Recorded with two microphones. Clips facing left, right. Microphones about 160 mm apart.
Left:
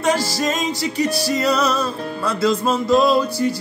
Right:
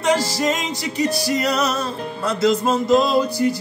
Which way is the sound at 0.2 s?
20° right (ahead or behind).